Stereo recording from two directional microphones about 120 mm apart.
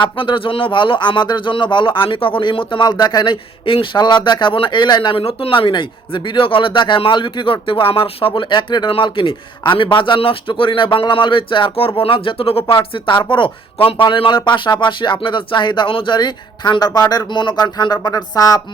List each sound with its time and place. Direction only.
0.0 s speech: 45° left (ahead or behind)